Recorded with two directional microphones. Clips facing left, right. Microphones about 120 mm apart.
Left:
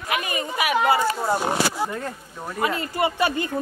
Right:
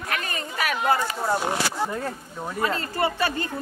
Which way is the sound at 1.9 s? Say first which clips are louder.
Right 1 dB; 10° right (ahead or behind).